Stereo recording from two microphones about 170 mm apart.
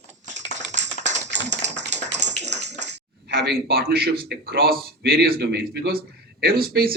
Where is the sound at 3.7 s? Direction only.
65° right (ahead or behind).